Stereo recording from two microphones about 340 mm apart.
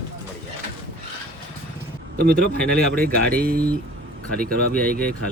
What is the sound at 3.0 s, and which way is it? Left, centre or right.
Speech, right.